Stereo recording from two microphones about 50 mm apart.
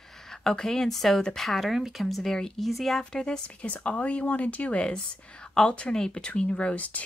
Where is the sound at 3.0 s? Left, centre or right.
Centre.